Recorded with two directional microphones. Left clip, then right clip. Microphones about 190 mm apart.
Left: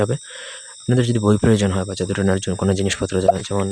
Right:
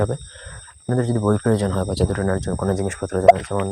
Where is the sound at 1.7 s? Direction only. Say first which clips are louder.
Right 1 dB; 10° left (ahead or behind).